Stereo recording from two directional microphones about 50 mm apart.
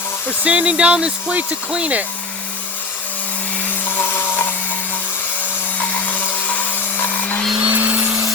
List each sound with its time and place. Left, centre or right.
0.4 s speech: right
3.8 s a sound: left
6.1 s vacuum cleaner: left
7.6 s vacuum cleaner: right